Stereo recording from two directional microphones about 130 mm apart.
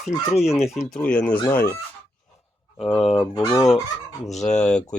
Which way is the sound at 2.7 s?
45° left (ahead or behind).